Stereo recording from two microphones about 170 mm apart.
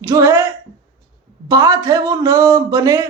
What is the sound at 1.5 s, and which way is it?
Speech, 20° right (ahead or behind).